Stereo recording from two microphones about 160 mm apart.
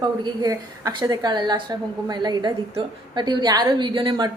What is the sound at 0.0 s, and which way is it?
A woman's voice, 25° right (ahead or behind).